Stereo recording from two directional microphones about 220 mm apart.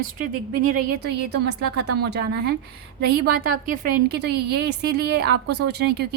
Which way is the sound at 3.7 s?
45° right (ahead or behind).